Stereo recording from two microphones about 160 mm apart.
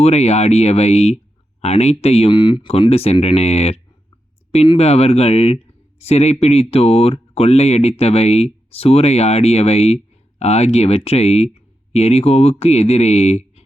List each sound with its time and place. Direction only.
0.0 s speech: 40° left (ahead or behind)